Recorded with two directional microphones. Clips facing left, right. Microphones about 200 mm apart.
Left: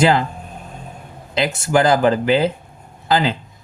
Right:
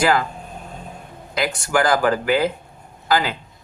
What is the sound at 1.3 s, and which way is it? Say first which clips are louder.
Speech: left 4 dB; 25° left (ahead or behind).